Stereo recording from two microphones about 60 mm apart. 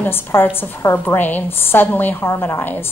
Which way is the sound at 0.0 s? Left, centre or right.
Left.